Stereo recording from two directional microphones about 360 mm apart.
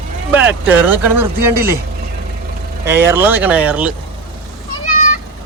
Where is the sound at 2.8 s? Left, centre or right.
Centre.